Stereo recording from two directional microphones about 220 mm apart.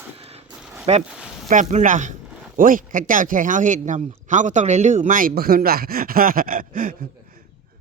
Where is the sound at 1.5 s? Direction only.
35° right (ahead or behind).